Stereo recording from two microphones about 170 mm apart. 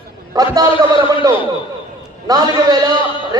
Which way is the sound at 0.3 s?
20° right (ahead or behind).